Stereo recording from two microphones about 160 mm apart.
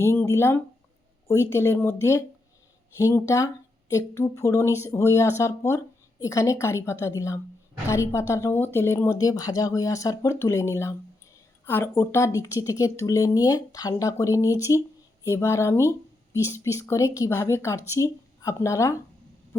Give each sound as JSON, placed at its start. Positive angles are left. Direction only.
{"t": 0.0, "sound": "speech", "side_deg": 15}